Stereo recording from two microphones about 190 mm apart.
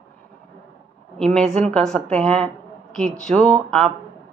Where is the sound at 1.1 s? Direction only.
5° left (ahead or behind).